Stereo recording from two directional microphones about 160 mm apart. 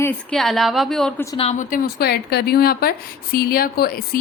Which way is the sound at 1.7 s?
85° left.